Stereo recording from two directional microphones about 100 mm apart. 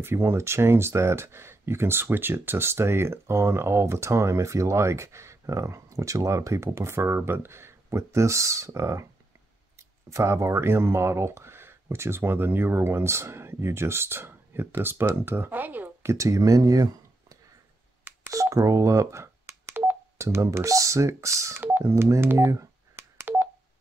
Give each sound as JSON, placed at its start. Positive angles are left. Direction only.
{"t": 0.0, "sound": "speech", "side_deg": -25}
{"t": 21.8, "sound": "telephone dialing", "side_deg": -25}